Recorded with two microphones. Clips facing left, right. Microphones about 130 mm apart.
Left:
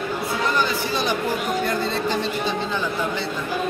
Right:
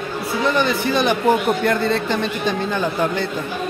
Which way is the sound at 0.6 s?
60° right (ahead or behind).